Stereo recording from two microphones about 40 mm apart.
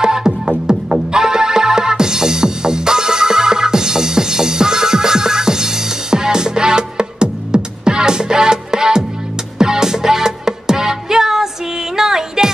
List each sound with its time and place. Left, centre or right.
0.0 s music: centre